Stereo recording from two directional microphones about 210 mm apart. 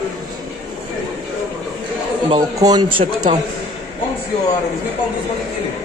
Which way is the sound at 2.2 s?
25° right (ahead or behind).